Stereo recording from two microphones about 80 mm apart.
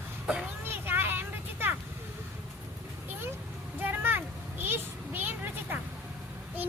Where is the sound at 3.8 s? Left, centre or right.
Right.